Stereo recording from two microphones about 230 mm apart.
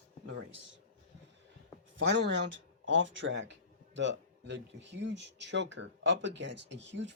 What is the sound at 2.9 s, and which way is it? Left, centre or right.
Speech, right.